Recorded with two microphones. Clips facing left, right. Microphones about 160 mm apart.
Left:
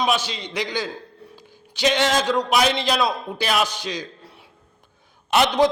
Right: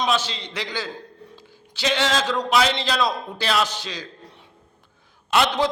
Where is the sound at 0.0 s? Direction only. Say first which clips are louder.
Left 1 dB; 10° left (ahead or behind).